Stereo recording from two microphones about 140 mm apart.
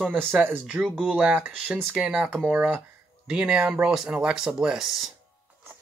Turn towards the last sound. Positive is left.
turn(degrees=0)  # may be behind; listen again after turning